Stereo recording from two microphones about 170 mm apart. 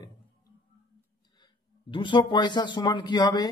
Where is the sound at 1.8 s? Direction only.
30° left (ahead or behind).